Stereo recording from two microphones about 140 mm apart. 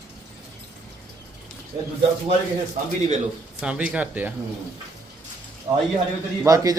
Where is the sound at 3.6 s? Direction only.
5° right (ahead or behind).